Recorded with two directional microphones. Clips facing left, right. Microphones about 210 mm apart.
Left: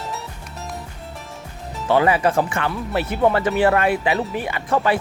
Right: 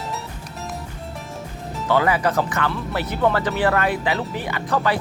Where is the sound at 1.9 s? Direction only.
25° left (ahead or behind).